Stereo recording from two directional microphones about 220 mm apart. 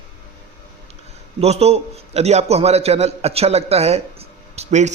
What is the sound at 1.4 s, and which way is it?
A man's voice, 30° right (ahead or behind).